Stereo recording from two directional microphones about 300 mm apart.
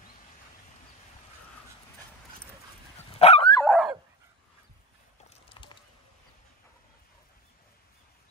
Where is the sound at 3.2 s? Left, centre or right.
Centre.